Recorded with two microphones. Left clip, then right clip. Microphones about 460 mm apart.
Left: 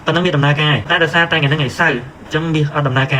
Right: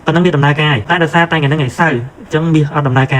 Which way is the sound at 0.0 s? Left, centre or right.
Centre.